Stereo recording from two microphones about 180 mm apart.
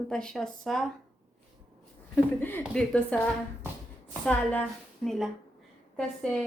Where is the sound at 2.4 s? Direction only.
10° left (ahead or behind).